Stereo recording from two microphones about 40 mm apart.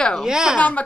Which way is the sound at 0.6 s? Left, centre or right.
Left.